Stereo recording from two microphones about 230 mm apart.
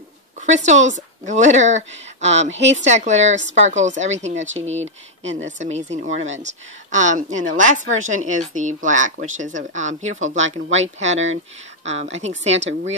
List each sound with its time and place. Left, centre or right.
0.4 s speech: right
5.2 s speech: right
5.6 s speech: right